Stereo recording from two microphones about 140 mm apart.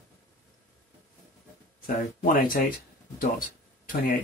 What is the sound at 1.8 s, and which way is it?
Speech, 85° left.